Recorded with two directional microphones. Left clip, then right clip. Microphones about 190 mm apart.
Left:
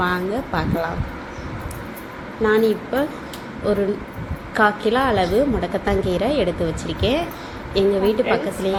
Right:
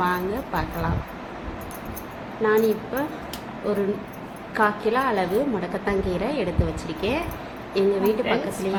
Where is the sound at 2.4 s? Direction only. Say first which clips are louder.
Left 3 dB; 20° left (ahead or behind).